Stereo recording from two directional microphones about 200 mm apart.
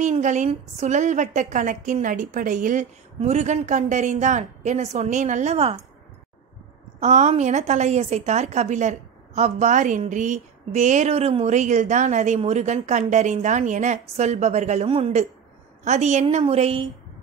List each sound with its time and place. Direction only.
0.0 s a woman's voice: 35° right (ahead or behind)
7.0 s a woman's voice: 35° right (ahead or behind)